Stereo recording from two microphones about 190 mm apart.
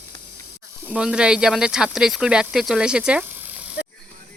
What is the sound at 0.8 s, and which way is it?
Speech, 5° right (ahead or behind).